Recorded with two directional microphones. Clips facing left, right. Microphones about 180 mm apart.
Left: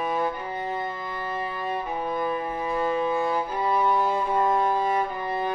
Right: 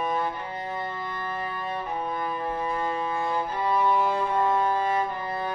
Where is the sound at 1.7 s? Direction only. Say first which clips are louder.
Left 2 dB; 5° left (ahead or behind).